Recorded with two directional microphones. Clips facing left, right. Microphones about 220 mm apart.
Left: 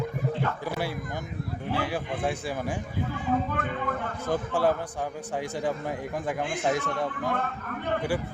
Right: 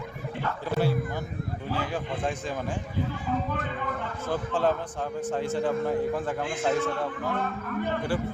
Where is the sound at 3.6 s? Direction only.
50° left (ahead or behind).